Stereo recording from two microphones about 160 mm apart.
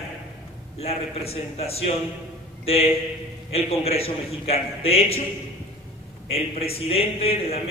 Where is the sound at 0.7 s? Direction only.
40° left (ahead or behind).